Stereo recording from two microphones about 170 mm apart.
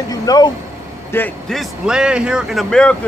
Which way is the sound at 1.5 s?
Centre (ahead or behind).